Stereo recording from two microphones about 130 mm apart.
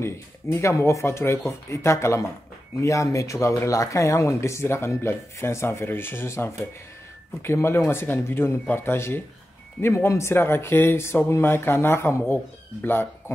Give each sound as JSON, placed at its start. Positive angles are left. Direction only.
{"t": 0.0, "sound": "speech", "side_deg": 25}